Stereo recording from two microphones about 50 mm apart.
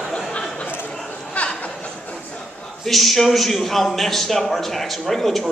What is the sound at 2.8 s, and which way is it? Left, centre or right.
A man's voice, centre.